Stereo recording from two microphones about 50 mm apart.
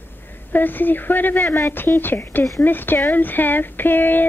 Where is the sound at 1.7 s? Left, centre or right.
Left.